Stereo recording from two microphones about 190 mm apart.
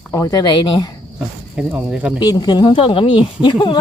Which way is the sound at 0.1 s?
20° left (ahead or behind).